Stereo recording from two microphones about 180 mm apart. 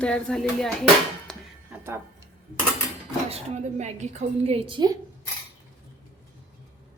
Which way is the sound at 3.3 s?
40° right (ahead or behind).